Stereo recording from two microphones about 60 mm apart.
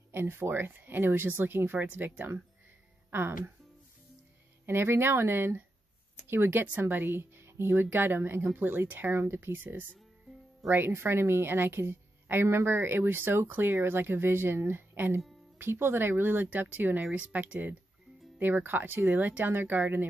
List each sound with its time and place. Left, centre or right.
0.1 s a woman's voice: right
4.6 s a woman's voice: right
7.1 s a woman's voice: right
18.4 s a woman's voice: right